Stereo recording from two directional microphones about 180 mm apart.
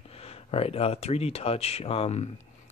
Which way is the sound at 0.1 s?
35° left (ahead or behind).